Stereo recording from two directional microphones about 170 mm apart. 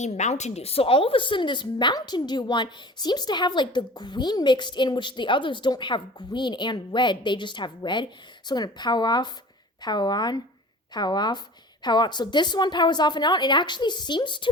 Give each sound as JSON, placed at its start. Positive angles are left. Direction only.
{"t": 0.0, "sound": "a woman's voice", "side_deg": 40}